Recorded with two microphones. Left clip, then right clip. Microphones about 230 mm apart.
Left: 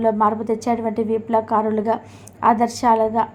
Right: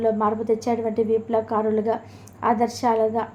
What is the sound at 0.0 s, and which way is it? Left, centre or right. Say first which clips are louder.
A woman's voice: left 4 dB; left.